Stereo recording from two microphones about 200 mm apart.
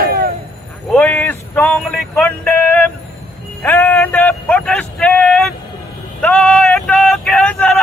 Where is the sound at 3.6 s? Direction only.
10° left (ahead or behind).